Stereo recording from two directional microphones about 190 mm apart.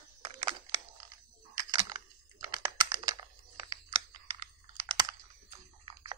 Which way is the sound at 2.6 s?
25° right (ahead or behind).